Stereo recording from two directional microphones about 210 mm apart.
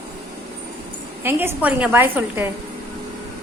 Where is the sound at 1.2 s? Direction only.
10° right (ahead or behind).